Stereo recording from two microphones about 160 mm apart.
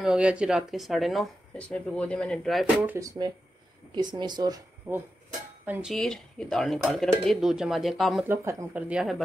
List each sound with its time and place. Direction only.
0.0 s speech: 5° right (ahead or behind)
2.8 s speech: 10° right (ahead or behind)
3.9 s speech: 25° right (ahead or behind)
4.9 s speech: 15° right (ahead or behind)
8.3 s speech: 15° right (ahead or behind)